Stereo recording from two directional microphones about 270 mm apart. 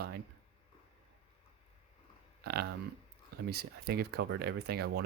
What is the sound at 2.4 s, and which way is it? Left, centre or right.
Speech, right.